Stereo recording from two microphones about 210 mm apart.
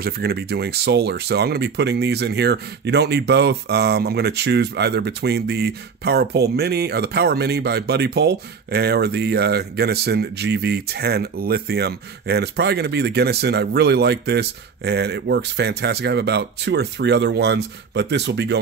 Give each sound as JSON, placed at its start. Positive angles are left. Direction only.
{"t": 0.0, "sound": "speech", "side_deg": -50}